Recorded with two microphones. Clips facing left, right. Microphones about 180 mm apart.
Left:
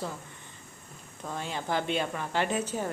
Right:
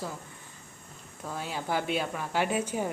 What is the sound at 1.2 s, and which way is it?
Speech, 5° right (ahead or behind).